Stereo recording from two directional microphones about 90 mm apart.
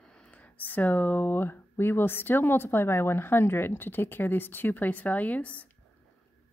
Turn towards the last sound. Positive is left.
turn(degrees=15)  # may be behind; listen again after turning